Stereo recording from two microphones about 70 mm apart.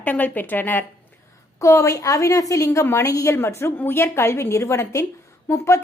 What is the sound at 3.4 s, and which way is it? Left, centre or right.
A woman's voice, left.